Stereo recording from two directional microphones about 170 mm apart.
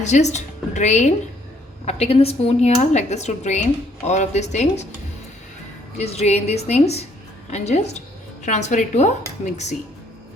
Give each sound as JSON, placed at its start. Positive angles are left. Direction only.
{"t": 0.0, "sound": "a woman's voice", "side_deg": 45}
{"t": 6.0, "sound": "a woman's voice", "side_deg": 40}